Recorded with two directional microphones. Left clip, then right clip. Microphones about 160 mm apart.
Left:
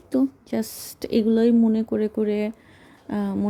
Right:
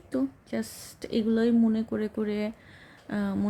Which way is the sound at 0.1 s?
25° left (ahead or behind).